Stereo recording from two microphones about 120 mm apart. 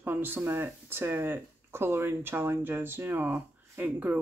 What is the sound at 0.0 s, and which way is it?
Speech, 15° right (ahead or behind).